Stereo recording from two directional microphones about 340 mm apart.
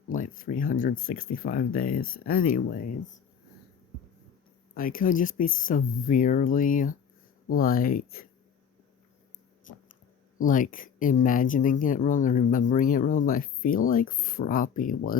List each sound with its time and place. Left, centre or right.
0.1 s speech: left
4.7 s speech: left
10.3 s speech: left